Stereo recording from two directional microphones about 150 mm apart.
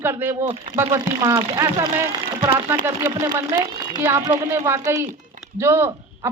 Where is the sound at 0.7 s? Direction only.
15° right (ahead or behind).